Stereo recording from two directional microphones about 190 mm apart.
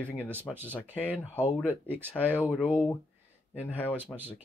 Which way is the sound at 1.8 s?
10° right (ahead or behind).